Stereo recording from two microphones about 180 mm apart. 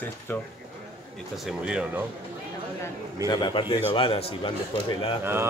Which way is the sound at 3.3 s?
25° left (ahead or behind).